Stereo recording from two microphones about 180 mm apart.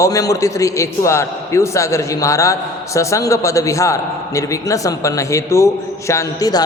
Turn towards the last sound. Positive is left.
turn(degrees=20)  # may be behind; listen again after turning